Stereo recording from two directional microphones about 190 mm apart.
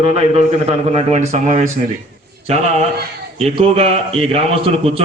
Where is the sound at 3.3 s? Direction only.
30° right (ahead or behind).